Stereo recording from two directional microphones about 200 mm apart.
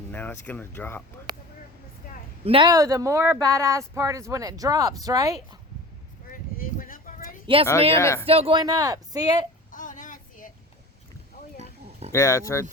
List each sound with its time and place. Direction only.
0.1 s speech: 10° left (ahead or behind)
2.4 s speech: 25° right (ahead or behind)
6.3 s a sound: 45° left (ahead or behind)
7.4 s speech: 25° right (ahead or behind)
7.9 s speech: 15° left (ahead or behind)
8.3 s speech: 30° right (ahead or behind)
9.7 s child singing: 40° left (ahead or behind)
12.1 s speech: 15° left (ahead or behind)